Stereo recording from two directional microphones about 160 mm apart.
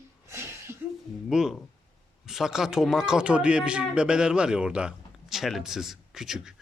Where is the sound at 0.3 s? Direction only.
15° right (ahead or behind).